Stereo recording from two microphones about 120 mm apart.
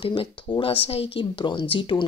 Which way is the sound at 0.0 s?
45° left (ahead or behind).